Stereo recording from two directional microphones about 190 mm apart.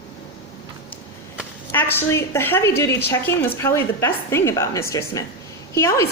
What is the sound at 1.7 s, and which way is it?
A woman's voice, 10° left (ahead or behind).